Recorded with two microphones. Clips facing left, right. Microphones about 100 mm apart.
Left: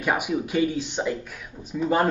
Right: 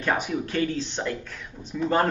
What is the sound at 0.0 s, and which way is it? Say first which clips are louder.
Speech: left 1 dB; 10° left (ahead or behind).